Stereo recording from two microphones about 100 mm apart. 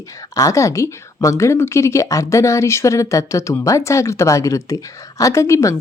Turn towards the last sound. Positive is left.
turn(degrees=30)  # may be behind; listen again after turning